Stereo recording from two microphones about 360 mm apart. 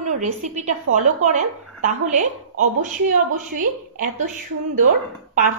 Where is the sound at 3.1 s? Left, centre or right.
Right.